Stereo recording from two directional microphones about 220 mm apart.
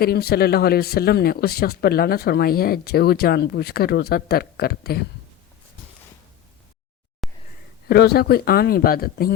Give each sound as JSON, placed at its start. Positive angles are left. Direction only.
{"t": 0.0, "sound": "speech", "side_deg": 45}
{"t": 7.2, "sound": "a sound", "side_deg": 0}
{"t": 7.9, "sound": "speech", "side_deg": 45}